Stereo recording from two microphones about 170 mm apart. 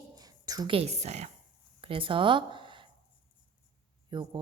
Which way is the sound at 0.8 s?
40° right (ahead or behind).